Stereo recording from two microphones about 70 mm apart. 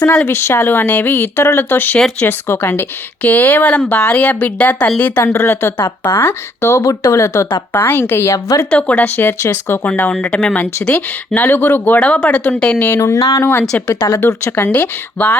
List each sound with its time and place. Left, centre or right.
0.3 s a woman's voice: left
5.2 s speech: left
6.8 s a woman's voice: left
7.7 s speech: left
8.7 s a woman's voice: left
9.9 s a woman's voice: left
11.3 s a woman's voice: left
13.0 s a woman's voice: left
13.4 s a woman's voice: left